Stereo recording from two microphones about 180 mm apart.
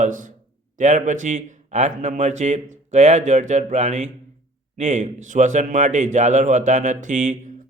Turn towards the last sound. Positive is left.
turn(degrees=-40)  # may be behind; listen again after turning